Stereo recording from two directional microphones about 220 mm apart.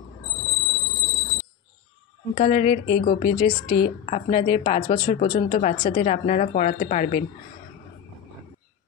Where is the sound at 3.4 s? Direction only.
20° left (ahead or behind).